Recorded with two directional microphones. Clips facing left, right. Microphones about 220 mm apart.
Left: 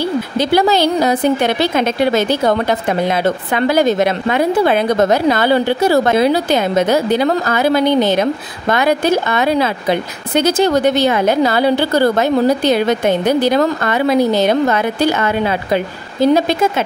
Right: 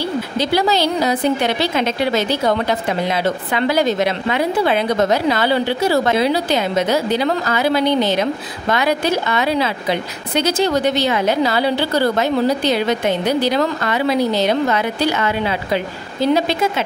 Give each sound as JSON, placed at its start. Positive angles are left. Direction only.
{"t": 0.4, "sound": "a woman's voice", "side_deg": 50}
{"t": 3.5, "sound": "a woman's voice", "side_deg": 50}